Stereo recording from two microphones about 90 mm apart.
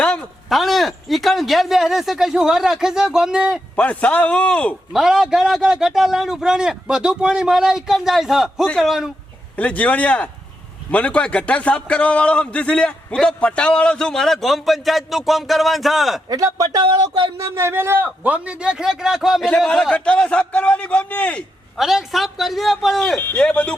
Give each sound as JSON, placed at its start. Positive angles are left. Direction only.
{"t": 0.0, "sound": "a sound", "side_deg": 10}
{"t": 0.4, "sound": "a man's voice", "side_deg": 0}
{"t": 3.8, "sound": "a man's voice", "side_deg": 15}
{"t": 4.9, "sound": "a man's voice", "side_deg": -5}
{"t": 9.6, "sound": "a man's voice", "side_deg": 15}
{"t": 16.3, "sound": "speech", "side_deg": -40}
{"t": 17.3, "sound": "a man's voice", "side_deg": -30}
{"t": 21.8, "sound": "a man's voice", "side_deg": -5}